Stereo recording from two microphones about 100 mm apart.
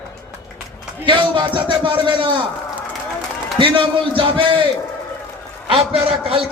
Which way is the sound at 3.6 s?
55° right (ahead or behind).